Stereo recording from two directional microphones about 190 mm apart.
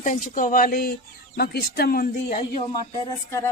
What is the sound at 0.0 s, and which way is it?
Speech, 45° left (ahead or behind).